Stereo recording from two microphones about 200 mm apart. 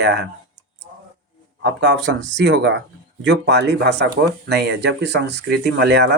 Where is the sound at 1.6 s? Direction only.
60° right (ahead or behind).